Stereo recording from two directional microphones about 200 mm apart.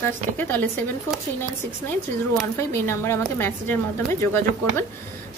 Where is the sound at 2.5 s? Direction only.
10° left (ahead or behind).